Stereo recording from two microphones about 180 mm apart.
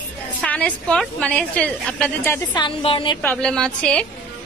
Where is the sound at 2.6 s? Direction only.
25° left (ahead or behind).